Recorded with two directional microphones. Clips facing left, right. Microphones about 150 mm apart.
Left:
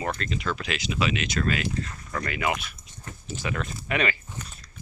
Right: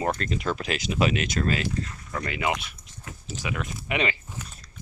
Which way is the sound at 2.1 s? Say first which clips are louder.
Even; 25° right (ahead or behind).